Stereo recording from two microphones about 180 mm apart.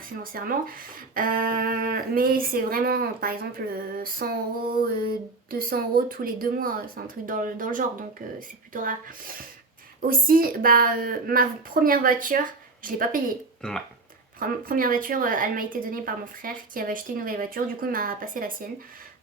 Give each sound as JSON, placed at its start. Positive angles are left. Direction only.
{"t": 0.2, "sound": "a woman's voice", "side_deg": -50}
{"t": 13.6, "sound": "speech", "side_deg": 5}
{"t": 14.3, "sound": "a woman's voice", "side_deg": -55}